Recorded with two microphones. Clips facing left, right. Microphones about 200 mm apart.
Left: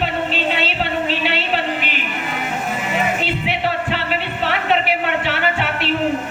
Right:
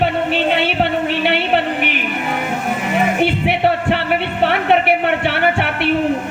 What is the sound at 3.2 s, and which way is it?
Music, 60° right (ahead or behind).